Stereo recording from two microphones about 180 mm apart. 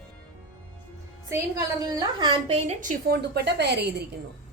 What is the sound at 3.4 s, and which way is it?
Speech, 65° right (ahead or behind).